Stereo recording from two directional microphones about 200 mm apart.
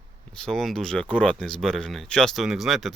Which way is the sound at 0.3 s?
Centre (ahead or behind).